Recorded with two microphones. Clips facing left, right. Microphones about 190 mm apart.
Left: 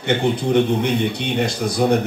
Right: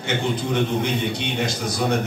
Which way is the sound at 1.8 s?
45° left (ahead or behind).